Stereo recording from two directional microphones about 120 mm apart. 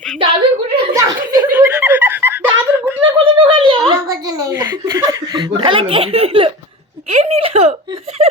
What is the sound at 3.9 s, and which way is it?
Speech, 30° right (ahead or behind).